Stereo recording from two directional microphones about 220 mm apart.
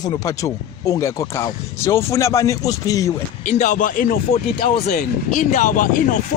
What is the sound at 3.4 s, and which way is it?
Speech, 35° left (ahead or behind).